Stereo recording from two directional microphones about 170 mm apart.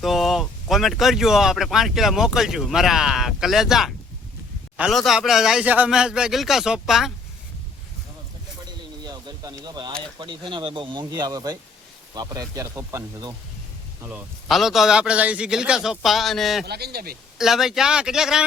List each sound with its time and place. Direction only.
0.0 s speech: centre (ahead or behind)
8.6 s a sound: 25° right (ahead or behind)
10.2 s speech: 25° right (ahead or behind)
14.4 s speech: centre (ahead or behind)
16.6 s speech: 70° right (ahead or behind)
17.3 s speech: centre (ahead or behind)